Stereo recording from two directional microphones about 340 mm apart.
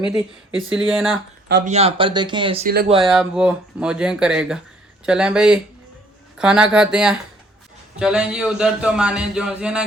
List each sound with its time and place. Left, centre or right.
0.1 s speech: centre
1.5 s speech: right
1.7 s speech: centre
3.1 s speech: centre